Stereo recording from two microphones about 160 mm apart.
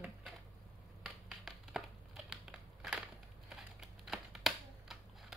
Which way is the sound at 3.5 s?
Centre (ahead or behind).